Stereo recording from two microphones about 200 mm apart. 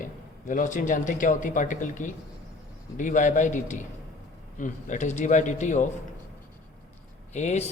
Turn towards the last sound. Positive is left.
turn(degrees=35)  # may be behind; listen again after turning